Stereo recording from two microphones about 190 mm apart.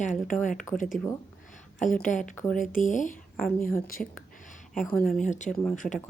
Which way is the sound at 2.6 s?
45° left (ahead or behind).